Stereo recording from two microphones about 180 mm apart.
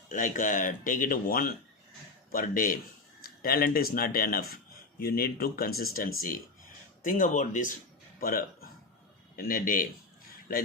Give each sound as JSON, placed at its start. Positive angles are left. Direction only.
{"t": 0.1, "sound": "speech", "side_deg": 45}